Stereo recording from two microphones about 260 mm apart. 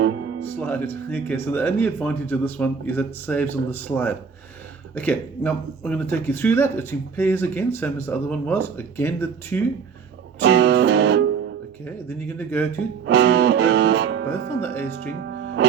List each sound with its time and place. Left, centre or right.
0.6 s speech: centre
10.4 s music: right
11.9 s speech: centre
13.1 s music: right
14.3 s speech: centre
15.1 s speech: right